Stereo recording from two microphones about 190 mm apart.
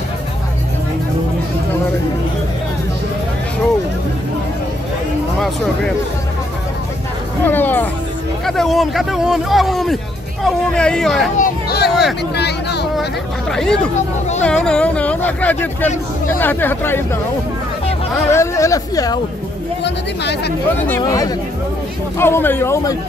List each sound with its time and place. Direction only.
7.4 s music: 10° left (ahead or behind)
8.5 s speech: centre (ahead or behind)
11.3 s hubbub: 50° left (ahead or behind)
11.9 s speech: centre (ahead or behind)
12.4 s a sound: 60° left (ahead or behind)
13.5 s a sound: 5° left (ahead or behind)
14.4 s speech: 5° left (ahead or behind)
18.3 s speech: 15° left (ahead or behind)
19.8 s speech: 60° left (ahead or behind)
21.0 s speech: 20° left (ahead or behind)